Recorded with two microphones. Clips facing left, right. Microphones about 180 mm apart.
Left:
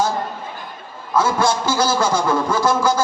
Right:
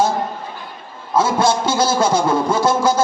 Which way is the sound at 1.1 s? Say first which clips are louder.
Right 2 dB; 25° right (ahead or behind).